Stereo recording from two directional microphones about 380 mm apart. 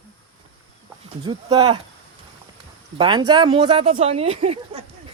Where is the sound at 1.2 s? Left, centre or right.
Centre.